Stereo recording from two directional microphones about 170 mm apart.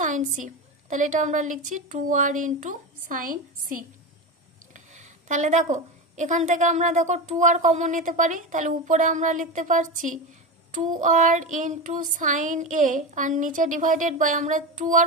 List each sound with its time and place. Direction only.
0.0 s a woman's voice: 50° right (ahead or behind)
4.7 s a woman's voice: 45° right (ahead or behind)